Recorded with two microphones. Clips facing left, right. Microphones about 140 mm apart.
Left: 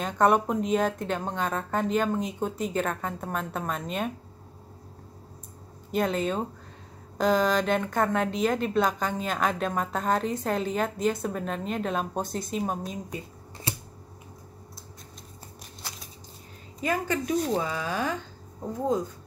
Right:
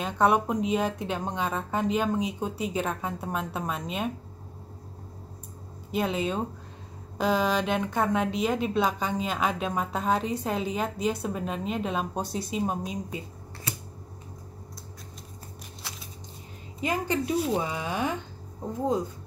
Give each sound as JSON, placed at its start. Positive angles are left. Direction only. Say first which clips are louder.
{"t": 0.0, "sound": "speech", "louder": "left 1 dB", "side_deg": -5}
{"t": 5.9, "sound": "speech", "louder": "left 1 dB", "side_deg": -5}
{"t": 12.2, "sound": "speech", "louder": "even", "side_deg": 50}
{"t": 12.5, "sound": "speech", "louder": "right 1 dB", "side_deg": 0}
{"t": 16.8, "sound": "speech", "louder": "even", "side_deg": -20}
{"t": 17.2, "sound": "speech", "louder": "even", "side_deg": -10}
{"t": 17.6, "sound": "speech", "louder": "even", "side_deg": -20}